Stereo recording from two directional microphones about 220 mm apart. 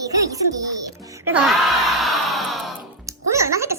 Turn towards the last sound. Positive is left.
turn(degrees=-15)  # may be behind; listen again after turning